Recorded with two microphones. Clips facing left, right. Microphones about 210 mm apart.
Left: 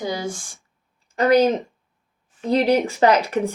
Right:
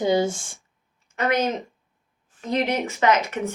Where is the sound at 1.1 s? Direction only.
35° left (ahead or behind).